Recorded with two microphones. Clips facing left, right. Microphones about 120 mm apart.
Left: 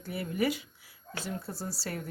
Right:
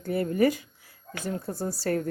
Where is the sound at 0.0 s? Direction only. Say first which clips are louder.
Right 7 dB; 45° right (ahead or behind).